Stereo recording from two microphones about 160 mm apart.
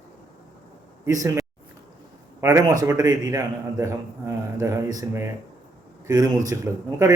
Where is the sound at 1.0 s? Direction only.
20° right (ahead or behind).